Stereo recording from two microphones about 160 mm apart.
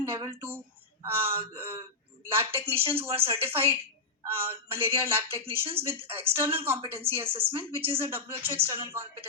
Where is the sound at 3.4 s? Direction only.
15° right (ahead or behind).